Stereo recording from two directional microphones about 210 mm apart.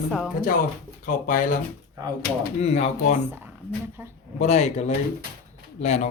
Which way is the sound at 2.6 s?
30° left (ahead or behind).